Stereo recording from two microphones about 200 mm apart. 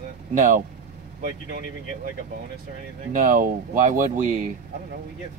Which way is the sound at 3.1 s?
40° right (ahead or behind).